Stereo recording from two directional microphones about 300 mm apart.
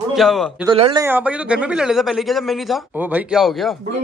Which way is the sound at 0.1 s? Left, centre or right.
Centre.